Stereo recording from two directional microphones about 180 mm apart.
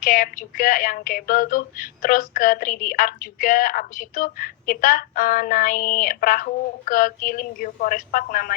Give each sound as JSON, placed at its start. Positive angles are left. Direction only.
{"t": 0.0, "sound": "speech", "side_deg": 50}